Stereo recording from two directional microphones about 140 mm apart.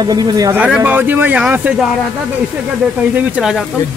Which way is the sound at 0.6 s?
10° right (ahead or behind).